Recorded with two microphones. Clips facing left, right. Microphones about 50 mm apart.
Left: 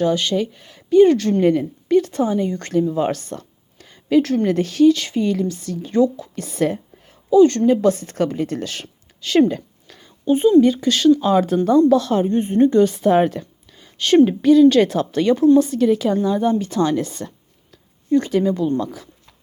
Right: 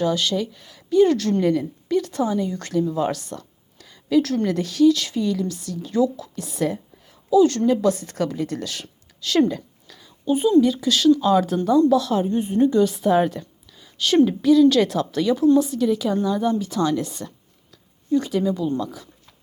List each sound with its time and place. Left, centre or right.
0.0 s speech: left
1.1 s a woman's voice: centre
1.4 s a woman's voice: left
6.3 s a woman's voice: left
9.6 s a woman's voice: left